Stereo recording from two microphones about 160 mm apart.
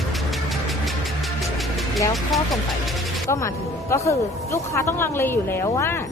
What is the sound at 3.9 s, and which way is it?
Speech, 20° left (ahead or behind).